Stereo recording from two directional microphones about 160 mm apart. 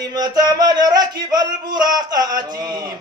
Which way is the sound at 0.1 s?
25° right (ahead or behind).